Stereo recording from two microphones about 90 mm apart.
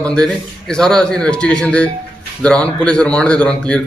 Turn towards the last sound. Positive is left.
turn(degrees=10)  # may be behind; listen again after turning